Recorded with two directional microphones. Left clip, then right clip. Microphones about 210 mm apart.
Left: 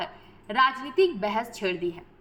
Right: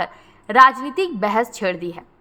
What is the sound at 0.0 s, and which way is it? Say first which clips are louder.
A woman's voice: right 9 dB; 55° right (ahead or behind).